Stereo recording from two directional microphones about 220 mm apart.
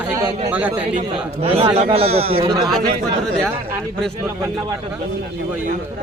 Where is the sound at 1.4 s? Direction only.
25° right (ahead or behind).